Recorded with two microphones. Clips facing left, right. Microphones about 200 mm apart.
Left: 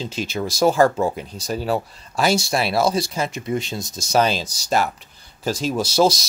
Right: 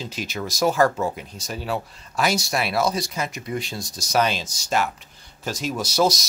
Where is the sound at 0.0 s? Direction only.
30° left (ahead or behind).